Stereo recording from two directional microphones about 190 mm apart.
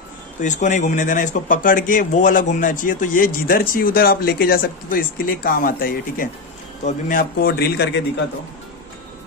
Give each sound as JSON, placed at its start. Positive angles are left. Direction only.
{"t": 0.4, "sound": "speech", "side_deg": 40}